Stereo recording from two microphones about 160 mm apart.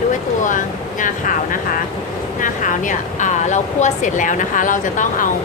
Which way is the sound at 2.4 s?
55° left (ahead or behind).